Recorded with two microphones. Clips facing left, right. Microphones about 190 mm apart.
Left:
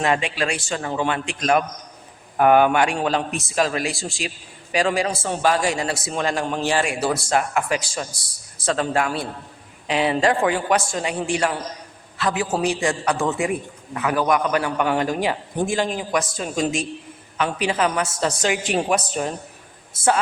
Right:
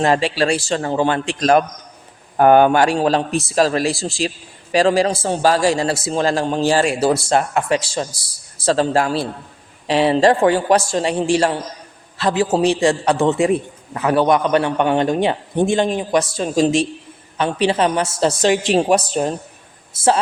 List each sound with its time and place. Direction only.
0.0 s a man's voice: 35° right (ahead or behind)